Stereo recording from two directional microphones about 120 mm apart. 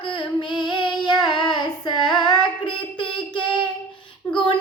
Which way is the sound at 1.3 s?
40° left (ahead or behind).